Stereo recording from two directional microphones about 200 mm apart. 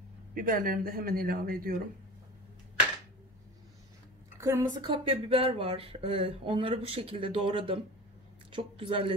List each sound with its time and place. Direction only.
0.3 s speech: 45° right (ahead or behind)
4.4 s a woman's voice: 15° right (ahead or behind)
4.9 s speech: 25° right (ahead or behind)